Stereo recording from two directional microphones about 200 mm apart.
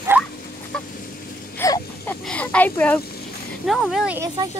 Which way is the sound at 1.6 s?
15° left (ahead or behind).